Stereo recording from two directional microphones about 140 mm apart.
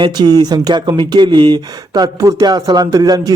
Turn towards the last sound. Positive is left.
turn(degrees=-25)  # may be behind; listen again after turning